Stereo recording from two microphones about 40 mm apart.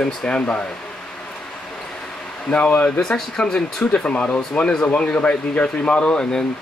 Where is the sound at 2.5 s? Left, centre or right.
Left.